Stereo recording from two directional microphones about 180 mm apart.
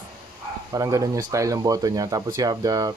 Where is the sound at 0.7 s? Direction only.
20° right (ahead or behind).